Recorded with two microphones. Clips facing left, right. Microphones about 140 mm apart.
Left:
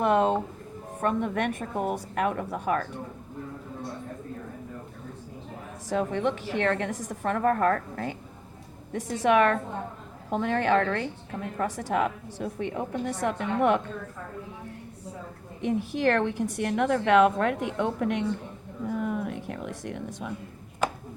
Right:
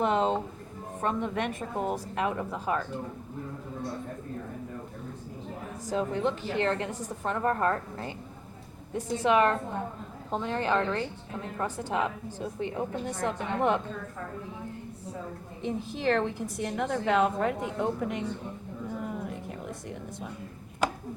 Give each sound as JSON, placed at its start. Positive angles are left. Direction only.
{"t": 0.0, "sound": "a sound", "side_deg": 55}
{"t": 1.0, "sound": "speech", "side_deg": 55}
{"t": 5.9, "sound": "a woman's voice", "side_deg": 70}
{"t": 8.9, "sound": "a woman's voice", "side_deg": 85}
{"t": 11.6, "sound": "a woman's voice", "side_deg": 75}
{"t": 15.6, "sound": "a woman's voice", "side_deg": 70}
{"t": 18.9, "sound": "a sound", "side_deg": 65}